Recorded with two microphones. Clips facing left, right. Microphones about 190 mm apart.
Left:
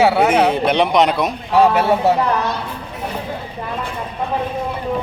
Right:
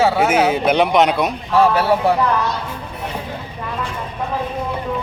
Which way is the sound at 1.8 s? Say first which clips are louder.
Left 1 dB; 20° left (ahead or behind).